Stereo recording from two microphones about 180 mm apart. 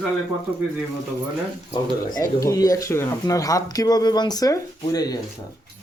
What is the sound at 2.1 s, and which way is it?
Speech, 20° left (ahead or behind).